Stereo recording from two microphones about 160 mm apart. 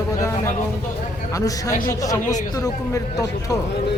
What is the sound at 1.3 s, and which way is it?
A man's voice, 20° left (ahead or behind).